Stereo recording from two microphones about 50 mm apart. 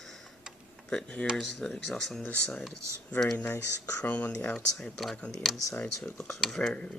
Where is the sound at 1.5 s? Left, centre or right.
Centre.